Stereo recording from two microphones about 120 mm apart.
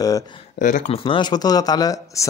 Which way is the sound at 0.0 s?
30° left (ahead or behind).